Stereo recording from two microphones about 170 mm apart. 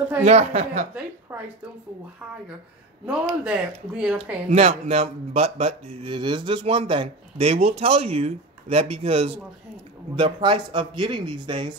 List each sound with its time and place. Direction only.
0.2 s speech: 40° right (ahead or behind)
1.3 s a sound: 10° right (ahead or behind)
3.1 s speech: 5° right (ahead or behind)
4.5 s speech: 35° right (ahead or behind)